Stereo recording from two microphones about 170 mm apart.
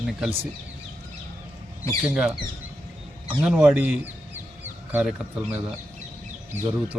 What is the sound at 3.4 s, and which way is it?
Chicken, 10° right (ahead or behind).